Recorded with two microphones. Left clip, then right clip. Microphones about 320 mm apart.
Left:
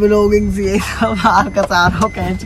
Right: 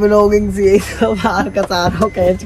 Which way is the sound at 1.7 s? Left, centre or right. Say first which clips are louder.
Left 6 dB; left.